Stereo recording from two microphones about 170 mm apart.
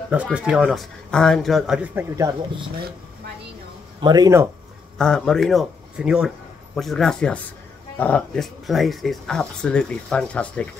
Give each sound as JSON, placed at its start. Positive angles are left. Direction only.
{"t": 0.1, "sound": "speech", "side_deg": -5}
{"t": 4.0, "sound": "speech", "side_deg": -25}
{"t": 4.9, "sound": "a man's voice", "side_deg": 5}